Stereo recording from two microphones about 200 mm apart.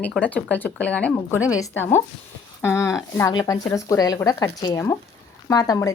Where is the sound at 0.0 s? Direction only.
5° left (ahead or behind).